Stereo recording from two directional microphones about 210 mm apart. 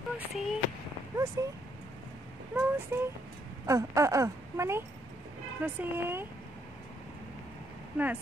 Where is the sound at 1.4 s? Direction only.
15° right (ahead or behind).